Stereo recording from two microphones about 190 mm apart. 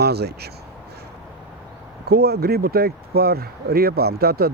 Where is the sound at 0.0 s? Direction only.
60° right (ahead or behind).